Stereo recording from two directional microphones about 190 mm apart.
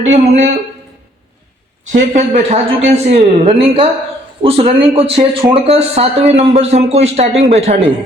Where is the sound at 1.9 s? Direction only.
40° right (ahead or behind).